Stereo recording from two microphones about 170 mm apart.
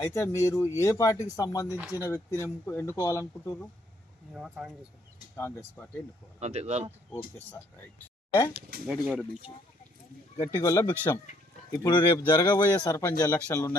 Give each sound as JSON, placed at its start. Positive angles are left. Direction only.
{"t": 0.0, "sound": "speech", "side_deg": 15}
{"t": 4.4, "sound": "speech", "side_deg": 0}
{"t": 5.4, "sound": "speech", "side_deg": 15}
{"t": 6.4, "sound": "speech", "side_deg": -40}
{"t": 7.3, "sound": "speech", "side_deg": 10}
{"t": 10.3, "sound": "speech", "side_deg": 20}
{"t": 11.7, "sound": "speech", "side_deg": 25}